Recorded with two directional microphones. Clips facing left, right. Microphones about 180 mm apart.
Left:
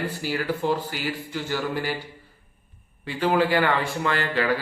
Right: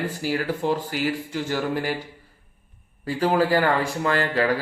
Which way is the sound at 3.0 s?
40° right (ahead or behind).